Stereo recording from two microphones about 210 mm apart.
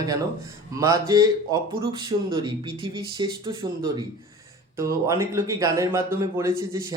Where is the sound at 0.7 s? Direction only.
15° right (ahead or behind).